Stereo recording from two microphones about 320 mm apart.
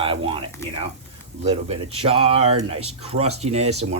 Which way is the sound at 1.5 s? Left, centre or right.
Centre.